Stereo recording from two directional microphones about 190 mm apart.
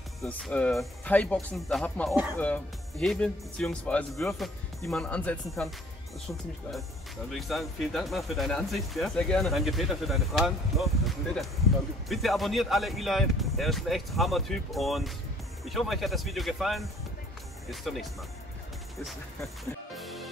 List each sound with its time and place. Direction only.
0.2 s speech: 5° left (ahead or behind)
7.2 s speech: centre (ahead or behind)
19.9 s music: centre (ahead or behind)